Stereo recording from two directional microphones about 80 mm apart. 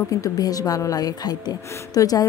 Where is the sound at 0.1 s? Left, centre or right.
Left.